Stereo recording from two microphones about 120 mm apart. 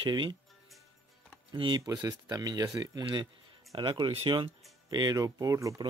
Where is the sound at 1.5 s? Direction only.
45° right (ahead or behind).